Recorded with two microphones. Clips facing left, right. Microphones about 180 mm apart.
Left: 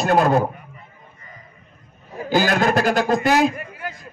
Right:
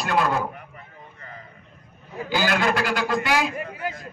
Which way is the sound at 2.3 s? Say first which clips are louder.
Left 5 dB; 45° left (ahead or behind).